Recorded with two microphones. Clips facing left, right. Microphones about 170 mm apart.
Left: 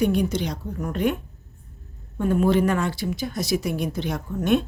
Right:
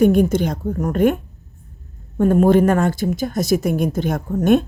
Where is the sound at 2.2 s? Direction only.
50° right (ahead or behind).